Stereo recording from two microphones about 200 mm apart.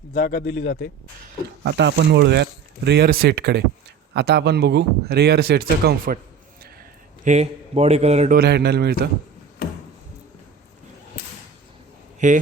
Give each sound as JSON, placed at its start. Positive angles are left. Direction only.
{"t": 0.1, "sound": "speech", "side_deg": 45}
{"t": 1.6, "sound": "speech", "side_deg": -60}
{"t": 7.3, "sound": "a man's voice", "side_deg": -35}
{"t": 8.4, "sound": "speech", "side_deg": -55}
{"t": 12.2, "sound": "a man's voice", "side_deg": -40}